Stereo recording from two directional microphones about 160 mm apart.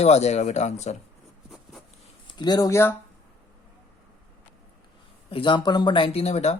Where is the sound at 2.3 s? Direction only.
25° left (ahead or behind).